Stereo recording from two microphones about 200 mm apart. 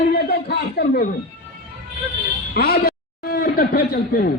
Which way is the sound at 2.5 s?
50° left (ahead or behind).